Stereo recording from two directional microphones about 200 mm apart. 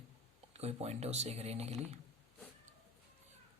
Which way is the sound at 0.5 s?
30° right (ahead or behind).